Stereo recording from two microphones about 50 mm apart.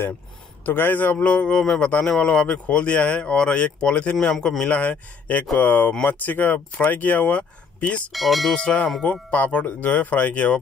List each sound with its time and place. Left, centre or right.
0.7 s speech: left; by 4.6 s centre
4.6 s speech: left
8.1 s speech: centre
8.5 s speech: left